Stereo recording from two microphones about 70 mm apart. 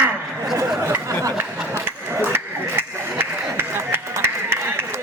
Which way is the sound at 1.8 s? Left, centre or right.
Right.